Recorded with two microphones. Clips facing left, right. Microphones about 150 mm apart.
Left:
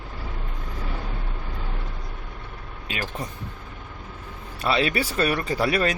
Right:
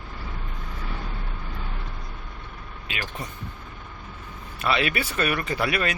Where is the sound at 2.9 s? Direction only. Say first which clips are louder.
Left 3 dB; 40° left (ahead or behind).